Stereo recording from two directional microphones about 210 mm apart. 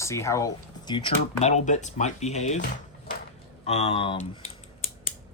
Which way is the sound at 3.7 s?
30° left (ahead or behind).